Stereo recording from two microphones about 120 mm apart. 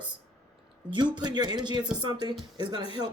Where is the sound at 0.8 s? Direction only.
40° right (ahead or behind).